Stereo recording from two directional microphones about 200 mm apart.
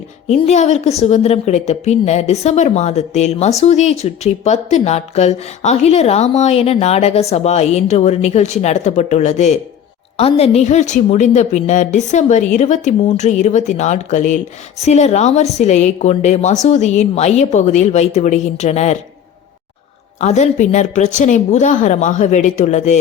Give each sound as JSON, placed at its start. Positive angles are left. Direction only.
{"t": 0.3, "sound": "speech", "side_deg": 35}
{"t": 20.1, "sound": "speech", "side_deg": 35}